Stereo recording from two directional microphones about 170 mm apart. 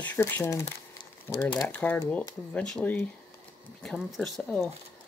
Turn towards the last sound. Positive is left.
turn(degrees=5)  # may be behind; listen again after turning